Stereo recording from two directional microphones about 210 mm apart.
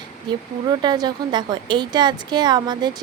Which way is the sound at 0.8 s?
20° right (ahead or behind).